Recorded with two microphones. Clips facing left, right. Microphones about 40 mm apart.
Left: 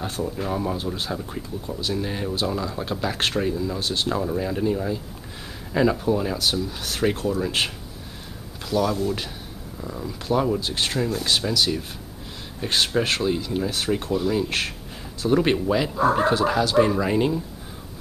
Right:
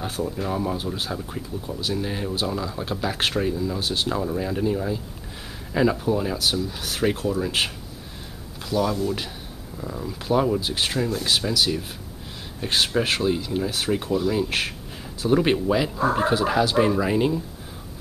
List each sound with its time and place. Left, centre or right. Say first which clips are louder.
0.0 s speech: even; centre